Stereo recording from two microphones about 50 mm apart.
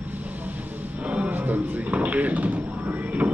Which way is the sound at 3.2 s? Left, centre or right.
Right.